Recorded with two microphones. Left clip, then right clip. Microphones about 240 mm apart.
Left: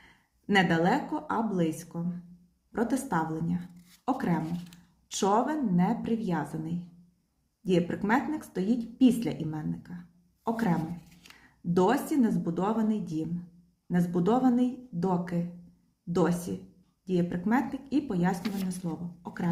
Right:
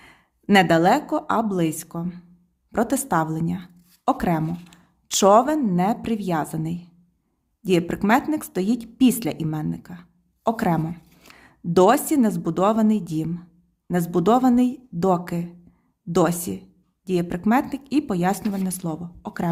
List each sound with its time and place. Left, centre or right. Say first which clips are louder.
0.0 s a woman's voice: right 9 dB; right